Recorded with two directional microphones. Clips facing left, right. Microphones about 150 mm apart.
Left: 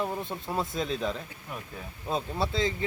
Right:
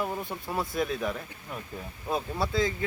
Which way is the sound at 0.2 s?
25° left (ahead or behind).